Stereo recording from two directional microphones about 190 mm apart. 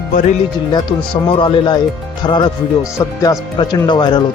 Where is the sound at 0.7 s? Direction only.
25° left (ahead or behind).